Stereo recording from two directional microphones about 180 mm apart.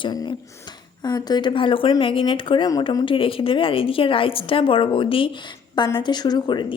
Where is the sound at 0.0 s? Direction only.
25° left (ahead or behind).